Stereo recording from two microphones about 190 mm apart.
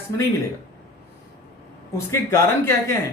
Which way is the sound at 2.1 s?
15° left (ahead or behind).